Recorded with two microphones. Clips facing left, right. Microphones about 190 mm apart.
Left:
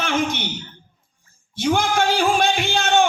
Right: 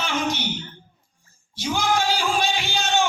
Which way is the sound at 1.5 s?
55° left (ahead or behind).